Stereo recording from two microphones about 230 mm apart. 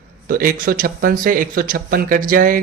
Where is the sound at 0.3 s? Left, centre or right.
Right.